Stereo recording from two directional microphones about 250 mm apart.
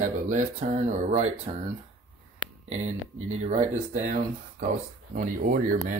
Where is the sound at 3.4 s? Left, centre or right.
Right.